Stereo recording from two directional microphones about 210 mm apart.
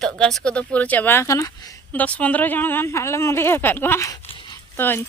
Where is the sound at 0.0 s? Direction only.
Centre (ahead or behind).